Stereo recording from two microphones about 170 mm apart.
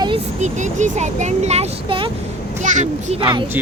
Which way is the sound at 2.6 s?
45° right (ahead or behind).